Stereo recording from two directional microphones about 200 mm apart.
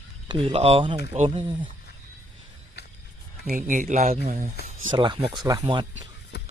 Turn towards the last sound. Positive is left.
turn(degrees=60)  # may be behind; listen again after turning